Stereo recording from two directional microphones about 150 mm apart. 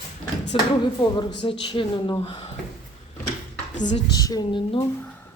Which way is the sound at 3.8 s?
55° left (ahead or behind).